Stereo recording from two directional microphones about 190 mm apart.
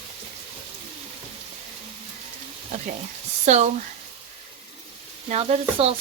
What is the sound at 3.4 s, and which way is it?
Speech, 35° right (ahead or behind).